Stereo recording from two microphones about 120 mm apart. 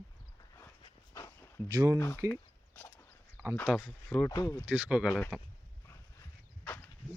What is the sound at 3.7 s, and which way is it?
Speech, 5° right (ahead or behind).